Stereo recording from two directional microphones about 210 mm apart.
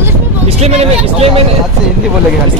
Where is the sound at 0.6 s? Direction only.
30° right (ahead or behind).